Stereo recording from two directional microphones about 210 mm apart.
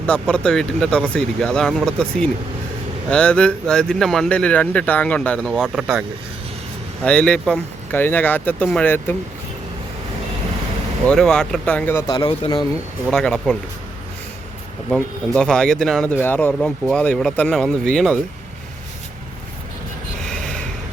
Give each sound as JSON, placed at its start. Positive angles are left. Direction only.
{"t": 0.0, "sound": "speech", "side_deg": 5}
{"t": 11.0, "sound": "speech", "side_deg": 5}
{"t": 12.0, "sound": "a man's voice", "side_deg": 20}
{"t": 13.1, "sound": "speech", "side_deg": 0}
{"t": 14.8, "sound": "speech", "side_deg": 5}
{"t": 20.2, "sound": "gasp", "side_deg": 0}